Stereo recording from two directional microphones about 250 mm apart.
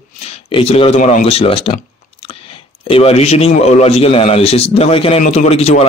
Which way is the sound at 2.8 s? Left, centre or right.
Left.